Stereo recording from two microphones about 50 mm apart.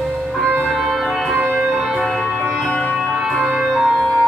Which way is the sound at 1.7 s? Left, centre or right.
Centre.